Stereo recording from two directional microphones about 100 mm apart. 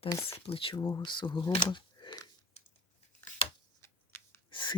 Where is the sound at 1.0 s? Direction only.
50° left (ahead or behind).